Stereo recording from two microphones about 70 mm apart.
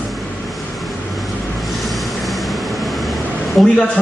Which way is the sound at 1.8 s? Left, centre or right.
Centre.